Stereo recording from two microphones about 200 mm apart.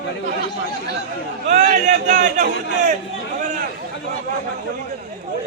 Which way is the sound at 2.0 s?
40° right (ahead or behind).